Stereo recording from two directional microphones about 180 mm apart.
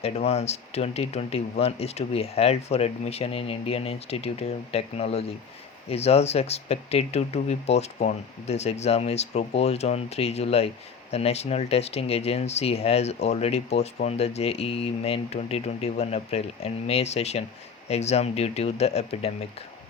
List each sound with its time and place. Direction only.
0.0 s speech: 35° left (ahead or behind)